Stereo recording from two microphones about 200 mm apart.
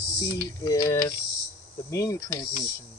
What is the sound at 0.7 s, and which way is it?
Speech, 15° left (ahead or behind).